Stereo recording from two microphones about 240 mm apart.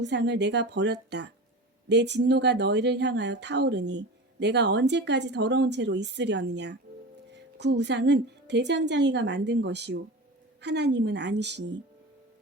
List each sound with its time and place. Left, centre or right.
0.0 s speech: right